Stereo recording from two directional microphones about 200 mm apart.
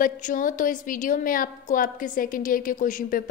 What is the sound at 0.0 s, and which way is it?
A woman's voice, 40° left (ahead or behind).